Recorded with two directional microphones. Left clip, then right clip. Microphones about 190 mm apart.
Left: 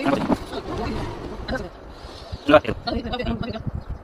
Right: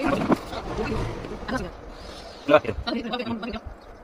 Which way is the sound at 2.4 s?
40° left (ahead or behind).